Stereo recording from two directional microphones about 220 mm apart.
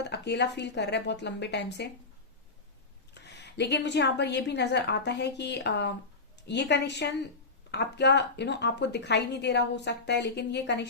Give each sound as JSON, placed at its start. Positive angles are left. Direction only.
{"t": 0.0, "sound": "a woman's voice", "side_deg": 50}
{"t": 3.2, "sound": "a woman's voice", "side_deg": 50}